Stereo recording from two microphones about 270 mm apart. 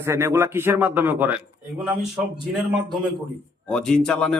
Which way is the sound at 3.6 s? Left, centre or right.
Centre.